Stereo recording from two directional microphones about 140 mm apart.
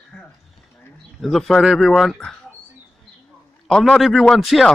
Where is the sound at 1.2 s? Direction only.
Centre (ahead or behind).